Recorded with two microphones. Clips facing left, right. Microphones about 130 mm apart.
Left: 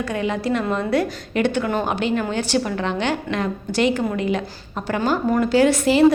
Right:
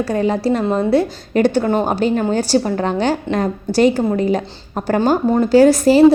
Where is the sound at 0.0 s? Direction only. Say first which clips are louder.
Right 6 dB; 35° right (ahead or behind).